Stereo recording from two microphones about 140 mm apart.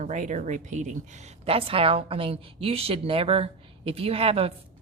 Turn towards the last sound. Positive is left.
turn(degrees=-45)  # may be behind; listen again after turning